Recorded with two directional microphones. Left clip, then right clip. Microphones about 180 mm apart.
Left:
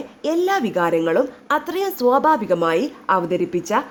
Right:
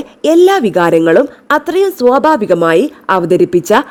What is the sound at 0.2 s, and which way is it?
A woman's voice, 45° right (ahead or behind).